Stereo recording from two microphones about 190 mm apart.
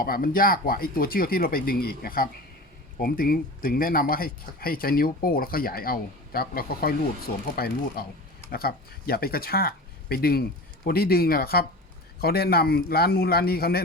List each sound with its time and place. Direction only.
0.0 s speech: 50° left (ahead or behind)